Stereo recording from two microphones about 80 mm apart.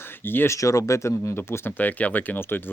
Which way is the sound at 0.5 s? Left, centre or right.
Left.